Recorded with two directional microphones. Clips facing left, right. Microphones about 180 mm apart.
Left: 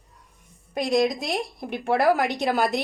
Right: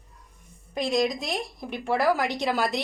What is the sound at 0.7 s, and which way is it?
A woman's voice, 60° left (ahead or behind).